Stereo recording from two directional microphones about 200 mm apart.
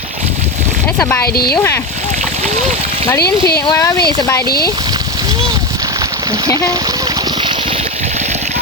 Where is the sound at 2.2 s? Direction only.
35° right (ahead or behind).